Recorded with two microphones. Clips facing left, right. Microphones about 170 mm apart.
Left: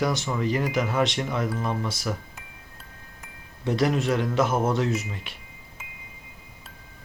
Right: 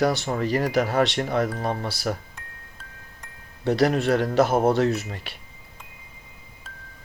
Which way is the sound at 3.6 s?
35° right (ahead or behind).